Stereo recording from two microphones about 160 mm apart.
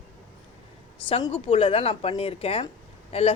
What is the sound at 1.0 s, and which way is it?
Speech, 35° left (ahead or behind).